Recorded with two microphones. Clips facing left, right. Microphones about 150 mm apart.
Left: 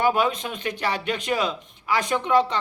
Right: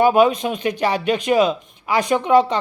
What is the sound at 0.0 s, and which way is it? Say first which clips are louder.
Speech: right 8 dB; 15° right (ahead or behind).